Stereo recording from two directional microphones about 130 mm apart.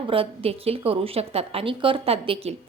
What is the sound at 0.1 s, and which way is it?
A woman's voice, 45° right (ahead or behind).